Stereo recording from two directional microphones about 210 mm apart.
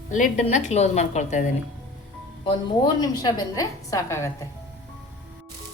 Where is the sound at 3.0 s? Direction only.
15° left (ahead or behind).